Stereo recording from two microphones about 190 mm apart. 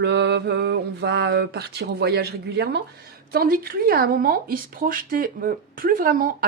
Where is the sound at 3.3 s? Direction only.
50° right (ahead or behind).